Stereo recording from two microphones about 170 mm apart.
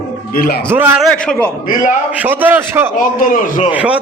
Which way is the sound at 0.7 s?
10° right (ahead or behind).